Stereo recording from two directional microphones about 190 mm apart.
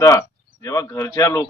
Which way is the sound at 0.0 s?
15° left (ahead or behind).